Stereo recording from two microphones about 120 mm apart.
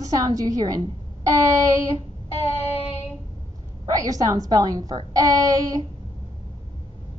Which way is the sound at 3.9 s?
30° right (ahead or behind).